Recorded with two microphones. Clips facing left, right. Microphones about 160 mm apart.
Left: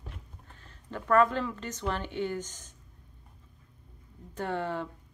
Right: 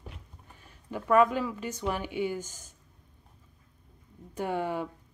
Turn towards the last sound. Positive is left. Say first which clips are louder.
# right 2 dB
turn(degrees=-10)  # may be behind; listen again after turning